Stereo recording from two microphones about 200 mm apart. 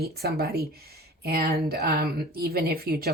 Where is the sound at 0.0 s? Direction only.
50° right (ahead or behind).